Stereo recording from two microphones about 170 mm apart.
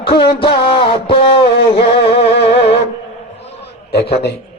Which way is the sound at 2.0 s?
75° left (ahead or behind).